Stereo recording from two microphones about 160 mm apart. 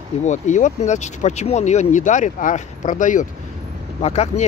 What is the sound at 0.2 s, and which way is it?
Speech, 50° left (ahead or behind).